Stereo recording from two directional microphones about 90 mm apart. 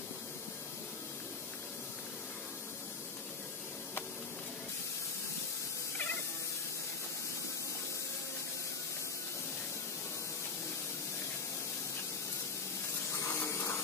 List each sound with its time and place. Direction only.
13.1 s spray: 30° left (ahead or behind)